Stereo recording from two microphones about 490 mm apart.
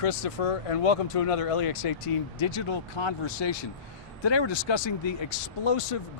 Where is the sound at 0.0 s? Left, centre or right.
Left.